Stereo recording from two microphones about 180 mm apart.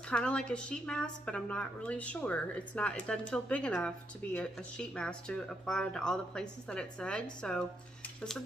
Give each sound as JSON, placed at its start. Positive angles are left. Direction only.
{"t": 0.1, "sound": "a woman's voice", "side_deg": 5}